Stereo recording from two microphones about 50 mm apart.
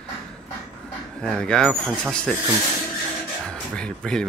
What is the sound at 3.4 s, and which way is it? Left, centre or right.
Speech, centre.